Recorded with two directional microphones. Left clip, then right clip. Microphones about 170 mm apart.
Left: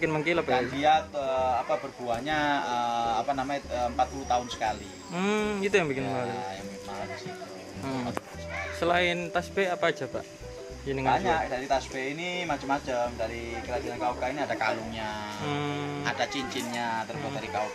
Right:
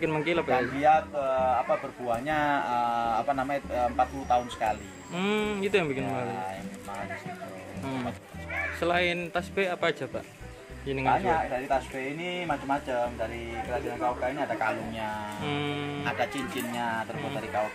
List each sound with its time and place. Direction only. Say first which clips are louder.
0.0 s speech: left 1 dB; 5° right (ahead or behind); by 4.7 s 20° right (ahead or behind)
5.1 s speech: even; centre (ahead or behind)
8.7 s speech: left 2 dB; centre (ahead or behind)
14.6 s speech: even; 15° right (ahead or behind)
15.4 s speech: even; centre (ahead or behind)
16.0 s speech: left 1 dB; 25° right (ahead or behind)